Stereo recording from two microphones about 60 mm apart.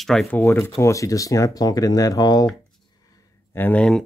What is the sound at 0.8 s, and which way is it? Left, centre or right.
Speech, left.